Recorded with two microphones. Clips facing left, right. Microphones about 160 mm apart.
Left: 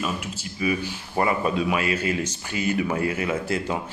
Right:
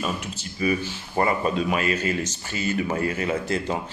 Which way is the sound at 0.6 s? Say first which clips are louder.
Right 1 dB; 10° left (ahead or behind).